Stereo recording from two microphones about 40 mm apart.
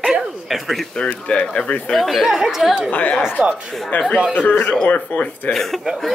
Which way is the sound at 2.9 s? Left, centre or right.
Left.